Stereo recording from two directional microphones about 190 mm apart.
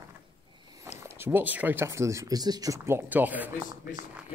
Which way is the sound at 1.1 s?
10° right (ahead or behind).